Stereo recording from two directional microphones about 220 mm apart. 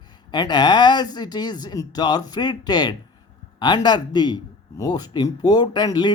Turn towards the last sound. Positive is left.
turn(degrees=20)  # may be behind; listen again after turning